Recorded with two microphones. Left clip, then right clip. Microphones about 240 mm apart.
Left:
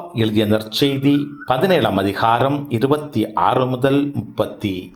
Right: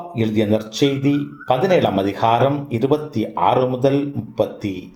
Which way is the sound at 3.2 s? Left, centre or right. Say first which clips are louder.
Even; left.